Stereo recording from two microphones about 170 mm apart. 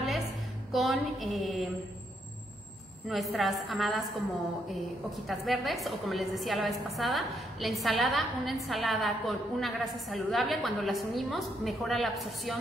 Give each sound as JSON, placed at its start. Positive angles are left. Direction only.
{"t": 0.7, "sound": "a woman's voice", "side_deg": 0}
{"t": 3.1, "sound": "a woman's voice", "side_deg": 0}